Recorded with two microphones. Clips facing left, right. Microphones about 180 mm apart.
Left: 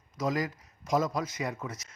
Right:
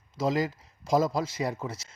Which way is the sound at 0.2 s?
30° right (ahead or behind).